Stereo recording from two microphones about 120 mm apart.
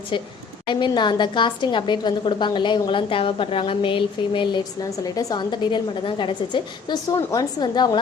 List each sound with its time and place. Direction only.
0.7 s a woman's voice: 40° left (ahead or behind)
7.2 s a woman's voice: 25° left (ahead or behind)